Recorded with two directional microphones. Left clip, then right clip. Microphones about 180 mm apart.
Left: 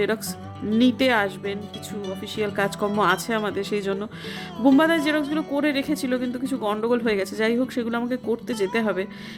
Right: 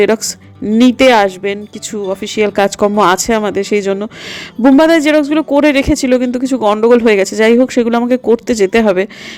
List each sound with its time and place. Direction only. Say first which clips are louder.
0.0 s speech: right 13 dB; 40° right (ahead or behind)